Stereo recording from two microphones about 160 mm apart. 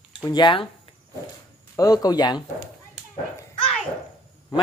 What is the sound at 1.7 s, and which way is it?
Speech, 25° left (ahead or behind).